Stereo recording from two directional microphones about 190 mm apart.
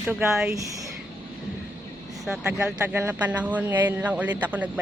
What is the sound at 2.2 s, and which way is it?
A man's voice, centre (ahead or behind).